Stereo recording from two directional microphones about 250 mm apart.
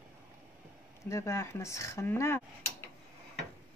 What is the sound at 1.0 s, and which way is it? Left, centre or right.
Speech, centre.